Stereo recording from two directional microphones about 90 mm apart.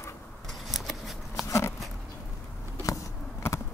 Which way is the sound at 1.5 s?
35° left (ahead or behind).